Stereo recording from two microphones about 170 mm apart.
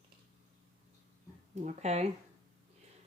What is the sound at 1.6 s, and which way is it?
Speech, 40° right (ahead or behind).